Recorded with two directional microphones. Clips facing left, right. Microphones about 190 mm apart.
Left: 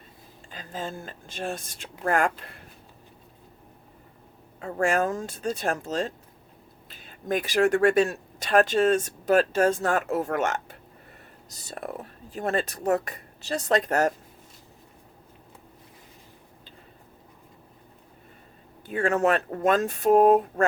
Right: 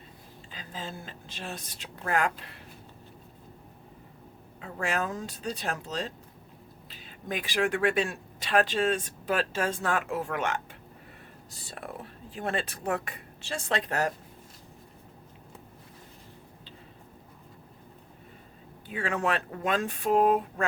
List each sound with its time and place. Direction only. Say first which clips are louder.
0.5 s speech: left 5 dB; 45° left (ahead or behind)
4.6 s speech: left 7 dB; 45° left (ahead or behind)
18.9 s speech: left 7 dB; 45° left (ahead or behind)